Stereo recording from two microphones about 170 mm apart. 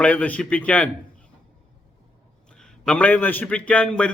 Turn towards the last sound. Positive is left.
turn(degrees=5)  # may be behind; listen again after turning